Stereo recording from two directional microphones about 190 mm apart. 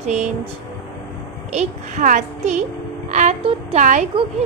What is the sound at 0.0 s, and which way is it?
Speech, 35° right (ahead or behind).